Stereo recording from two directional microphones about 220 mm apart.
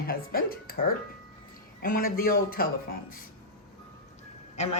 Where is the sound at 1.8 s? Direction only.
40° left (ahead or behind).